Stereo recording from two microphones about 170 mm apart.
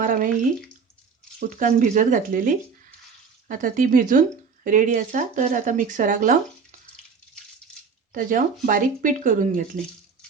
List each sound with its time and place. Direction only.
0.0 s drip: 50° right (ahead or behind)
1.4 s speech: 50° right (ahead or behind)
8.1 s speech: 50° right (ahead or behind)